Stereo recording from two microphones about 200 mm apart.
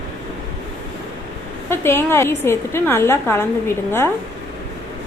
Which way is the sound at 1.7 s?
10° left (ahead or behind).